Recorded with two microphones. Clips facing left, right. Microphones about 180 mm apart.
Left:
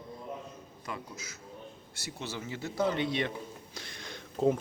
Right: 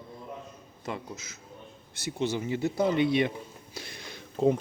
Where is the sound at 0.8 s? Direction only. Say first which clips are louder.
Right 5 dB; 25° right (ahead or behind).